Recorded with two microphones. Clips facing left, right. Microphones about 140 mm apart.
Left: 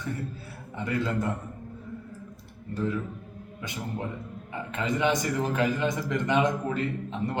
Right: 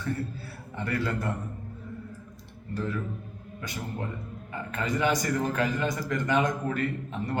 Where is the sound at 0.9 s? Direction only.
20° left (ahead or behind).